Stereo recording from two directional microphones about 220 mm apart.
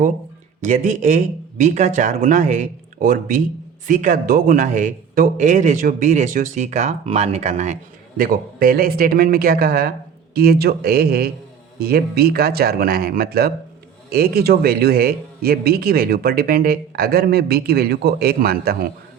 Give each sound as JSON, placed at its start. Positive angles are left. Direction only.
{"t": 0.6, "sound": "a man's voice", "side_deg": -35}